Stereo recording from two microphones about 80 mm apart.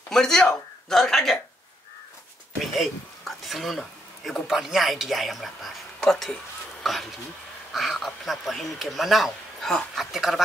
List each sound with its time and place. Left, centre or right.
0.1 s speech: centre
2.6 s speech: centre